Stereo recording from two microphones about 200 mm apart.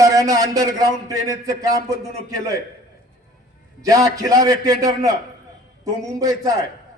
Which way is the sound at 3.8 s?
15° right (ahead or behind).